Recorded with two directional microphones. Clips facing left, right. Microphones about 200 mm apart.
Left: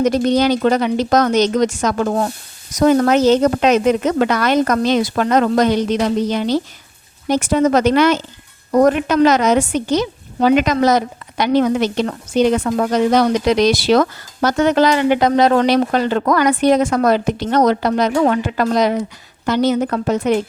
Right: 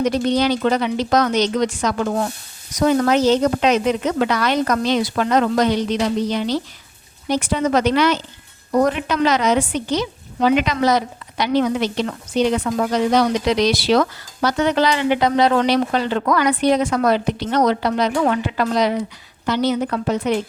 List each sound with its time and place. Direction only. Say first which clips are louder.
0.0 s a woman's voice: left 3 dB; 45° left (ahead or behind)